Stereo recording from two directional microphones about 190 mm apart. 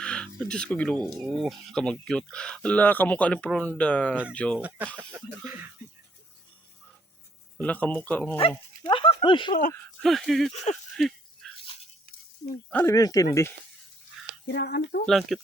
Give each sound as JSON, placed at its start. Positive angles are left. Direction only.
{"t": 0.0, "sound": "a sound", "side_deg": 5}
{"t": 0.9, "sound": "speech", "side_deg": -20}
{"t": 1.4, "sound": "speech", "side_deg": 0}
{"t": 7.6, "sound": "speech", "side_deg": 10}
{"t": 8.4, "sound": "speech", "side_deg": 30}
{"t": 10.0, "sound": "speech", "side_deg": 0}
{"t": 10.5, "sound": "speech", "side_deg": 35}
{"t": 10.9, "sound": "a sound", "side_deg": 0}
{"t": 12.7, "sound": "speech", "side_deg": 15}
{"t": 14.4, "sound": "speech", "side_deg": 60}
{"t": 15.0, "sound": "speech", "side_deg": 0}